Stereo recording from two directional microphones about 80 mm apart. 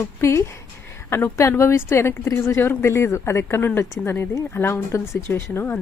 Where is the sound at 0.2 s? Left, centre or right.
Left.